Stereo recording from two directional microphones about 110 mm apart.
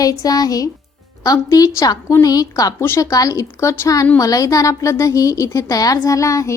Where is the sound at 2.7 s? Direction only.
20° left (ahead or behind).